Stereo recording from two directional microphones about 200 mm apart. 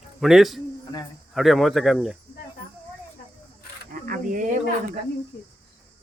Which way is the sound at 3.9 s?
45° right (ahead or behind).